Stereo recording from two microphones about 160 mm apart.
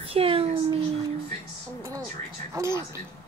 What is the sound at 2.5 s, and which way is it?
Speech, 15° right (ahead or behind).